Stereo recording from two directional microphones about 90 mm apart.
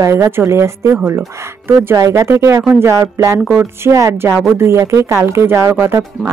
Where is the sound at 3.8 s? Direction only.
35° right (ahead or behind).